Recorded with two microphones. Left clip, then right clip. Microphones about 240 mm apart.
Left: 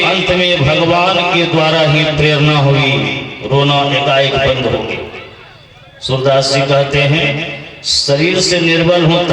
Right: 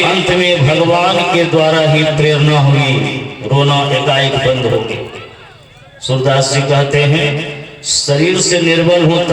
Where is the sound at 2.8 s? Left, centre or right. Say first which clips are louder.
Left 1 dB; right.